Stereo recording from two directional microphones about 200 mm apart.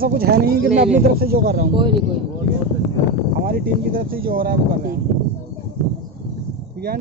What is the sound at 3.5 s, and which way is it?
Speech, 50° right (ahead or behind).